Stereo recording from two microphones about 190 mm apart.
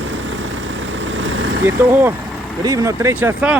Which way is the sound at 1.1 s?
90° right.